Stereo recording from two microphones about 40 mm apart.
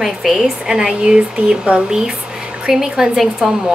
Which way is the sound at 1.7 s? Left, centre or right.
Right.